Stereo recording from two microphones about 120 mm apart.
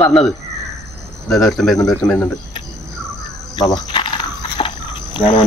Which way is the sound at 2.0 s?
10° left (ahead or behind).